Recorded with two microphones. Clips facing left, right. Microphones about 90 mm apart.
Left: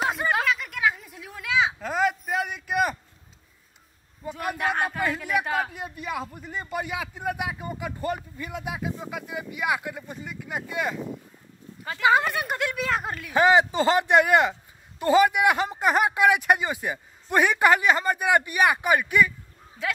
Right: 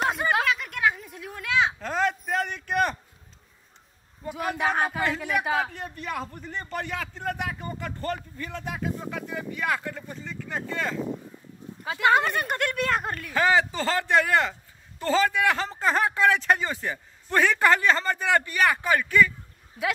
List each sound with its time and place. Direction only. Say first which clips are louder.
0.0 s a sound: even; centre (ahead or behind)
4.3 s a man's voice: right 1 dB; centre (ahead or behind)
12.0 s speech: even; centre (ahead or behind)
13.3 s speech: left 4 dB; 20° left (ahead or behind)